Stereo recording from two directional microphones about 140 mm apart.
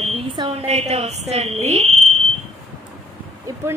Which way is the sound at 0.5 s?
50° right (ahead or behind).